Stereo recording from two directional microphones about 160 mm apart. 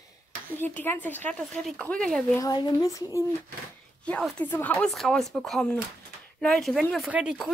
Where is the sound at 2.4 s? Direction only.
25° left (ahead or behind).